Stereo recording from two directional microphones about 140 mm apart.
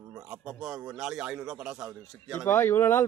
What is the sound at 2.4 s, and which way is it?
Speech, 15° left (ahead or behind).